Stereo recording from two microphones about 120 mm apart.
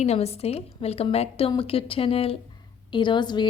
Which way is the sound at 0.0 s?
60° left (ahead or behind).